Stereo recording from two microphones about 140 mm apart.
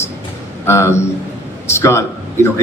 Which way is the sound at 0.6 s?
20° left (ahead or behind).